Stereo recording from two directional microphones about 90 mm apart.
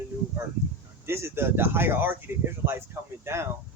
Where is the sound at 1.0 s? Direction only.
25° right (ahead or behind).